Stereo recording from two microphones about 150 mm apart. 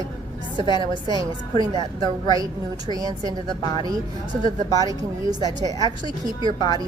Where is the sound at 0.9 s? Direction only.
25° right (ahead or behind).